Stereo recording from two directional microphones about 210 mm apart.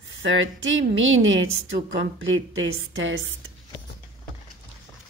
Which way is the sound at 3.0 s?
65° right (ahead or behind).